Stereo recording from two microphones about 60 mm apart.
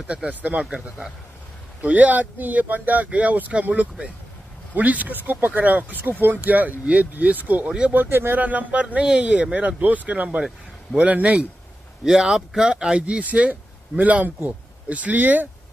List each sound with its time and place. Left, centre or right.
0.0 s speech: centre
1.8 s speech: right
12.0 s speech: centre; by 15.4 s right